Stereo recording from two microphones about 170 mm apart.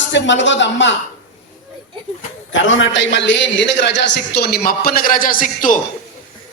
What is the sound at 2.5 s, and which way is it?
A man's voice, 90° left.